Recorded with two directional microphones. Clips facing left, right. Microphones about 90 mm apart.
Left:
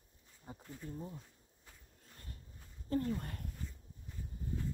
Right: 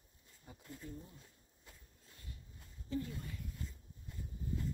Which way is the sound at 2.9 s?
55° left (ahead or behind).